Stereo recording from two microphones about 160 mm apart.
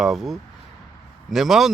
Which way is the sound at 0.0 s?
Centre (ahead or behind).